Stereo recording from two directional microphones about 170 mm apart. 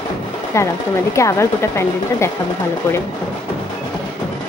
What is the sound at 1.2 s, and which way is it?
Speech, 15° left (ahead or behind).